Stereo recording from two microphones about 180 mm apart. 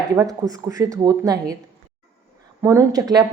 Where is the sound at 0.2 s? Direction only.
20° right (ahead or behind).